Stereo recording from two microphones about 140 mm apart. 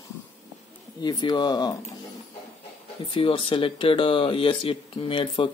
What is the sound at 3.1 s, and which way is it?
Speech, 40° left (ahead or behind).